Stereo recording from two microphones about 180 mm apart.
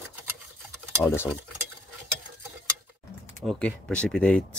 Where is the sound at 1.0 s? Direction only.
15° left (ahead or behind).